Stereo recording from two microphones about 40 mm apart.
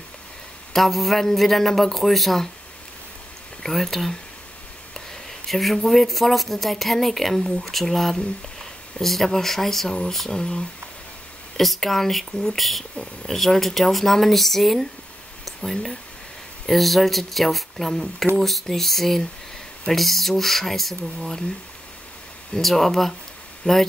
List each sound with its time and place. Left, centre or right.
0.7 s speech: centre
3.6 s speech: centre
5.5 s speech: centre
10.3 s speech: centre
11.5 s speech: centre
12.3 s speech: centre
12.5 s speech: centre
22.6 s speech: centre